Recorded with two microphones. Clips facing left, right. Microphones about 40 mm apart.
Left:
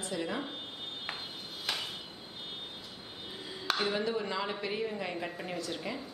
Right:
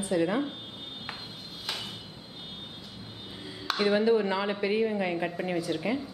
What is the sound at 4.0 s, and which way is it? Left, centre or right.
A woman's voice, centre.